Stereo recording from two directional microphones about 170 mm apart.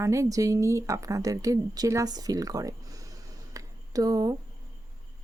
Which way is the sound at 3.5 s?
20° right (ahead or behind).